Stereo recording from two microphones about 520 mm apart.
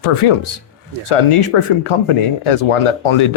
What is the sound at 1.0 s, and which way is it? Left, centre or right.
Speech, left.